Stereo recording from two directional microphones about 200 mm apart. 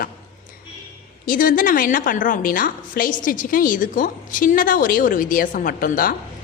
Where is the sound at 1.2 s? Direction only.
45° left (ahead or behind).